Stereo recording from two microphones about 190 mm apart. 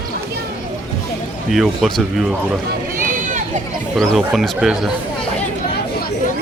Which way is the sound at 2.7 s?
45° right (ahead or behind).